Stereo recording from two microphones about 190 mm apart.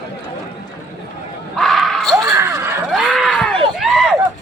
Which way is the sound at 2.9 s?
Centre (ahead or behind).